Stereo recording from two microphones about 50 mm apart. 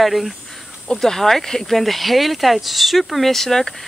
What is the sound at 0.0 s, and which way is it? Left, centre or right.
Speech, centre.